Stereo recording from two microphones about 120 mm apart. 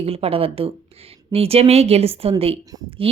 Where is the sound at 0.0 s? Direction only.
55° right (ahead or behind).